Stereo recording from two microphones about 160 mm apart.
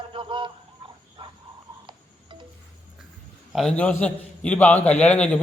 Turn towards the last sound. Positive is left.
turn(degrees=10)  # may be behind; listen again after turning